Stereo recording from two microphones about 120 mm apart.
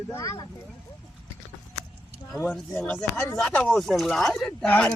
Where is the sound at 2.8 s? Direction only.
15° left (ahead or behind).